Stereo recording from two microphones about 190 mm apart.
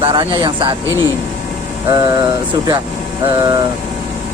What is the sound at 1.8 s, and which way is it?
Speech, 20° right (ahead or behind).